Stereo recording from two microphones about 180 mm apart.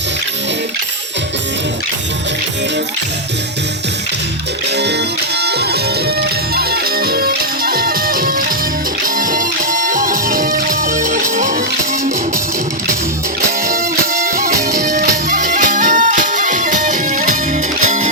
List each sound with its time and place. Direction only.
5.4 s music: 65° right (ahead or behind); by 11.5 s 45° right (ahead or behind)
13.7 s music: 55° right (ahead or behind)